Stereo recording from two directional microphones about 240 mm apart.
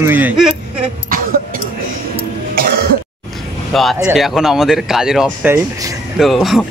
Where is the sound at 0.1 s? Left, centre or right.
Centre.